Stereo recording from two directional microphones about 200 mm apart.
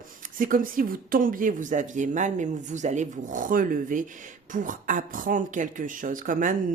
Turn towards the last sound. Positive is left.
turn(degrees=-40)  # may be behind; listen again after turning